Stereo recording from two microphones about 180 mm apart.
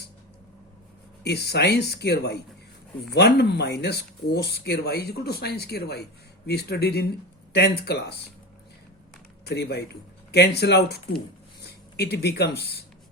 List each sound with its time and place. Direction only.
1.2 s speech: 65° left (ahead or behind)
9.5 s speech: 65° left (ahead or behind)